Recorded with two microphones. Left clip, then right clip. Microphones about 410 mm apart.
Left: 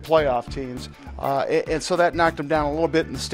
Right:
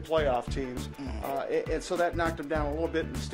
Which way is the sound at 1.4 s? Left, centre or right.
Left.